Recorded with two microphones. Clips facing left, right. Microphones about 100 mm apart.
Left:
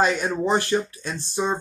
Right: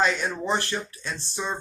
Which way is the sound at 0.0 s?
15° left (ahead or behind).